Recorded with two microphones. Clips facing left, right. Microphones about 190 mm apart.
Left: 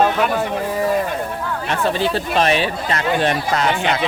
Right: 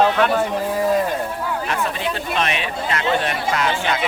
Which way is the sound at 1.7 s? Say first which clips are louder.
Left 4 dB; 30° left (ahead or behind).